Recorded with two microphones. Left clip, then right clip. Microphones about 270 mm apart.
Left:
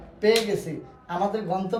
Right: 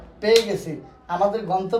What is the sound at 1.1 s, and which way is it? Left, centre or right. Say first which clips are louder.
Speech: right 5 dB; centre.